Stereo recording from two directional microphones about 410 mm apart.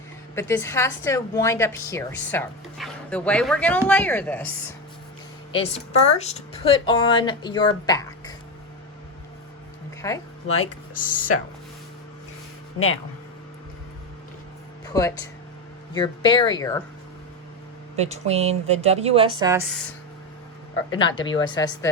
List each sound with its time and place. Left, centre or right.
0.3 s a woman's voice: centre
10.0 s speech: centre
10.6 s speech: centre
14.9 s speech: centre
17.9 s a woman's voice: centre
21.2 s speech: centre